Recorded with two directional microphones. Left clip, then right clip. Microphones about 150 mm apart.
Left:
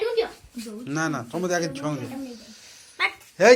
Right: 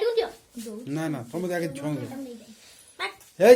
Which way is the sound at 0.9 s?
20° right (ahead or behind).